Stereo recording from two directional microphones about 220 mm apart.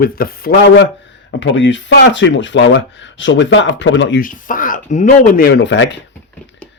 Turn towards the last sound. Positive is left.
turn(degrees=55)  # may be behind; listen again after turning